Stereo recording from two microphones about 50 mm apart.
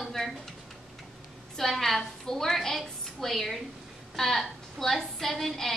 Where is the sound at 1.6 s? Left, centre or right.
Centre.